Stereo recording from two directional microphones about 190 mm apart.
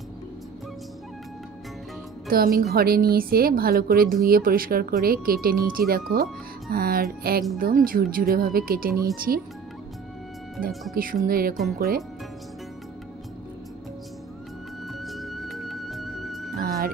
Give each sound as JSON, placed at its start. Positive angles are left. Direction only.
{"t": 2.2, "sound": "a woman's voice", "side_deg": -50}
{"t": 10.7, "sound": "speech", "side_deg": 0}
{"t": 11.2, "sound": "a woman's voice", "side_deg": -50}
{"t": 14.9, "sound": "music", "side_deg": 0}
{"t": 16.5, "sound": "music", "side_deg": -50}